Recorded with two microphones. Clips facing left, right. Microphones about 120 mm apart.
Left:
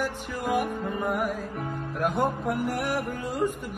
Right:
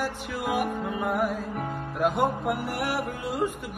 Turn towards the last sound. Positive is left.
turn(degrees=-15)  # may be behind; listen again after turning